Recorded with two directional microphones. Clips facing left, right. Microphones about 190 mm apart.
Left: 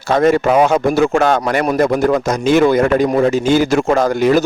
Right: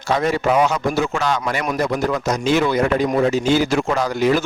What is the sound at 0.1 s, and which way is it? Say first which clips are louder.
Speech: left 6 dB; 50° left (ahead or behind).